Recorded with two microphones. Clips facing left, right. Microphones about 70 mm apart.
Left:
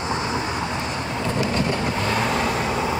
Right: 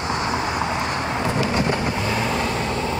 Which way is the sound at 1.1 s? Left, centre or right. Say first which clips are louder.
Even; right.